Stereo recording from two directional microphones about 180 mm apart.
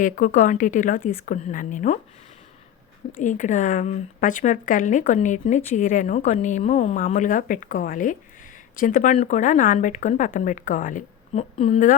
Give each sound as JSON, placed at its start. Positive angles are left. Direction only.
{"t": 0.0, "sound": "speech", "side_deg": 45}
{"t": 3.2, "sound": "speech", "side_deg": 45}